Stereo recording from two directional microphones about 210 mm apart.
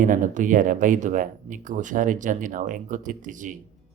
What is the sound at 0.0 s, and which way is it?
Speech, 40° right (ahead or behind).